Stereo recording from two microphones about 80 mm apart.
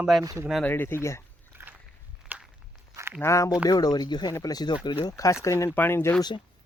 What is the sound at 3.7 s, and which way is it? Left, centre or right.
Speech, left.